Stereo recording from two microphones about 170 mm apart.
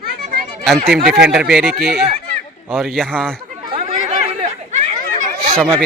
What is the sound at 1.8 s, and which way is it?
Speech, 70° right (ahead or behind).